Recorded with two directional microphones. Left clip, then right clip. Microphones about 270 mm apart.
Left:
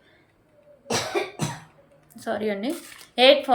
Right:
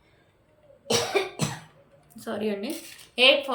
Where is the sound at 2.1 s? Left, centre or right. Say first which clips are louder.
Left 3 dB; centre.